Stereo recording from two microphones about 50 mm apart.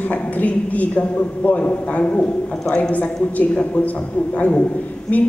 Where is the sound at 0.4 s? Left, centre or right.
Left.